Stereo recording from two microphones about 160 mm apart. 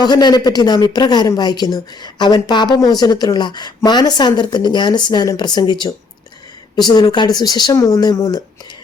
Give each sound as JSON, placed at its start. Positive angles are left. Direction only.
{"t": 0.0, "sound": "speech", "side_deg": 25}